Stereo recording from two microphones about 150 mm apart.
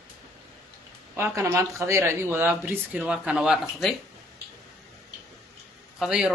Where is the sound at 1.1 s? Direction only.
15° right (ahead or behind).